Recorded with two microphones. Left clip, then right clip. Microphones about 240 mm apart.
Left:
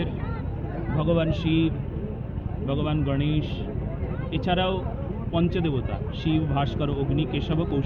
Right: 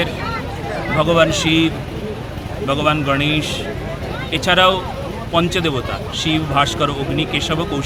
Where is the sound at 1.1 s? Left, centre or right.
Centre.